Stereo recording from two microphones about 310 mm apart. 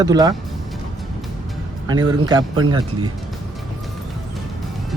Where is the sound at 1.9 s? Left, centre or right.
Centre.